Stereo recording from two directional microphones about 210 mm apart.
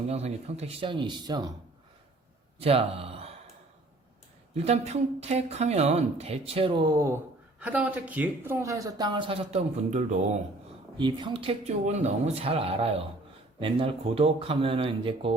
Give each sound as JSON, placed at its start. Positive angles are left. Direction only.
{"t": 0.1, "sound": "speech", "side_deg": -30}
{"t": 2.6, "sound": "speech", "side_deg": -25}
{"t": 4.5, "sound": "speech", "side_deg": -30}
{"t": 10.9, "sound": "speech", "side_deg": -20}